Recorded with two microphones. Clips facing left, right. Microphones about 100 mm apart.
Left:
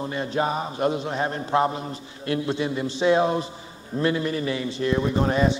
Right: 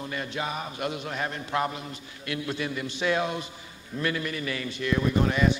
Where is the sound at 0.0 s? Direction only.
30° left (ahead or behind).